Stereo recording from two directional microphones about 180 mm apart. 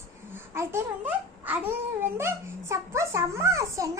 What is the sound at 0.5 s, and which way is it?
A child's voice, 15° right (ahead or behind).